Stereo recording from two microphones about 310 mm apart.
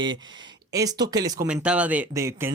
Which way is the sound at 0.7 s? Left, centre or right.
Centre.